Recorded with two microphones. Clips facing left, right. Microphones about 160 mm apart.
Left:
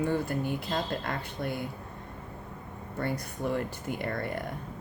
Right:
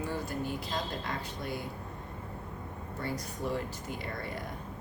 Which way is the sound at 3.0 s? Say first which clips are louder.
Left 4 dB; 55° left (ahead or behind).